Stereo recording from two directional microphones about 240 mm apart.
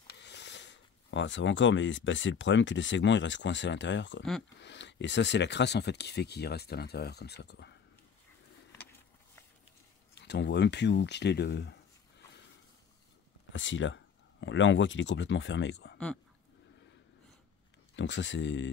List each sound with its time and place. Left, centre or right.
0.1 s a sound: left
1.1 s speech: left
10.1 s speech: left
13.5 s speech: left
17.9 s speech: left